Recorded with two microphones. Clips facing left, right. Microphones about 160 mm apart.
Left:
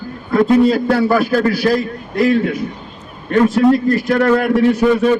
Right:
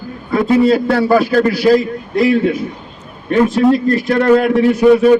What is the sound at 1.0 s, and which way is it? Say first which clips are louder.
Speech: right 2 dB; 15° right (ahead or behind).